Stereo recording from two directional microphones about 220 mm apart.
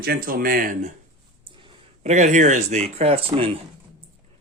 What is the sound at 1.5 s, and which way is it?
Speech, 25° right (ahead or behind).